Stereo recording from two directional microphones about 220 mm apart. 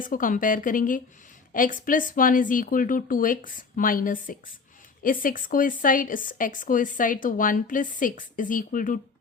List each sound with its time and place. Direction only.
0.0 s speech: 40° left (ahead or behind)